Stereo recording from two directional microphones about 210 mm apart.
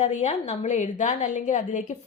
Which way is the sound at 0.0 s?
35° left (ahead or behind).